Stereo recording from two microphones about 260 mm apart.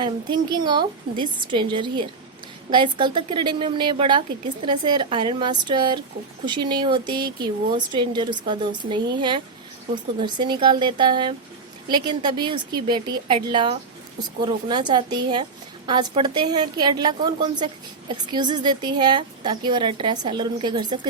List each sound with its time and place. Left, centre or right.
0.0 s speech: centre